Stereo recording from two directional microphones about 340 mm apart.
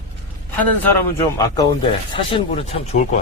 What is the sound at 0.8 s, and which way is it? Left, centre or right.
A man's voice, centre.